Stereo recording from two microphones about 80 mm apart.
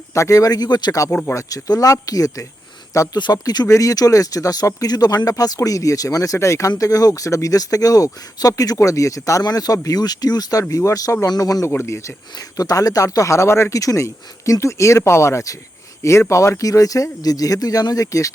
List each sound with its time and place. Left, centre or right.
0.1 s speech: left
1.3 s speech: left
3.3 s speech: left
3.7 s speech: left
9.4 s speech: left
12.5 s speech: left